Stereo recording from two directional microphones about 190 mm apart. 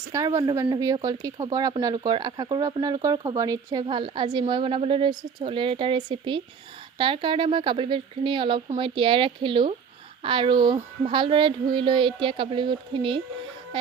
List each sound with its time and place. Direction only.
0.1 s speech: 15° right (ahead or behind)